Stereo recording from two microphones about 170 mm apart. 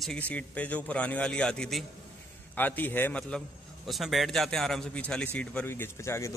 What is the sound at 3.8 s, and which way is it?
A man's voice, centre (ahead or behind).